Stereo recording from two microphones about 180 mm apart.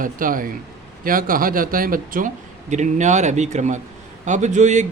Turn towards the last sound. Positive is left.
turn(degrees=-40)  # may be behind; listen again after turning